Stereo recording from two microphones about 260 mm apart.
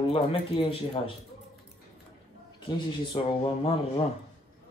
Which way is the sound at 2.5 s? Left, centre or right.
Centre.